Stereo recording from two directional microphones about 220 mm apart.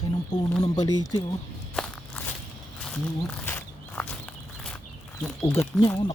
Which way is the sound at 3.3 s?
5° left (ahead or behind).